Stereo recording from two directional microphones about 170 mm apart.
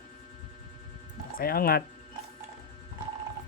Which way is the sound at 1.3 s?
60° left (ahead or behind).